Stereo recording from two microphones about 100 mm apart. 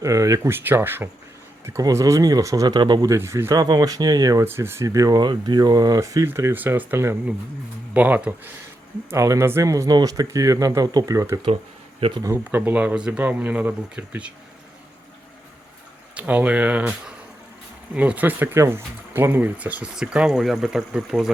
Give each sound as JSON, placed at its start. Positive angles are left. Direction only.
{"t": 0.0, "sound": "speech", "side_deg": -35}
{"t": 3.1, "sound": "speech", "side_deg": -30}
{"t": 3.5, "sound": "speech", "side_deg": -40}
{"t": 4.4, "sound": "speech", "side_deg": -25}
{"t": 6.2, "sound": "speech", "side_deg": -25}
{"t": 9.0, "sound": "speech", "side_deg": -30}
{"t": 11.9, "sound": "speech", "side_deg": -70}
{"t": 12.5, "sound": "speech", "side_deg": -20}
{"t": 16.1, "sound": "speech", "side_deg": -15}
{"t": 17.9, "sound": "speech", "side_deg": -15}